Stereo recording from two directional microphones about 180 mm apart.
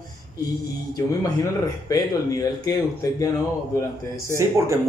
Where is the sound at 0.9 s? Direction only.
20° left (ahead or behind).